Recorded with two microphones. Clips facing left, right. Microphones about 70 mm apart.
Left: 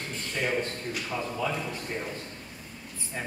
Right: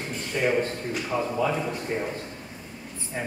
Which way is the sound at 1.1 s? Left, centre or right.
Right.